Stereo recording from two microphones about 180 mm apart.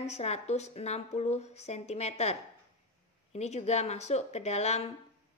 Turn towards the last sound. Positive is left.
turn(degrees=35)  # may be behind; listen again after turning